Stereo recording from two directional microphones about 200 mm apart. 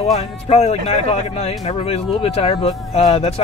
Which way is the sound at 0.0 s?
30° left (ahead or behind).